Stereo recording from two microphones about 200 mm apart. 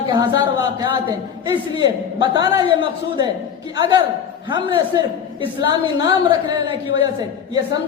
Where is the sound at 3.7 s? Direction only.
20° right (ahead or behind).